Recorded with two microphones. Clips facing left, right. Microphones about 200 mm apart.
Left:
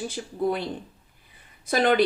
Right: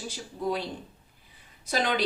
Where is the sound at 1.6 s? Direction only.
55° left (ahead or behind).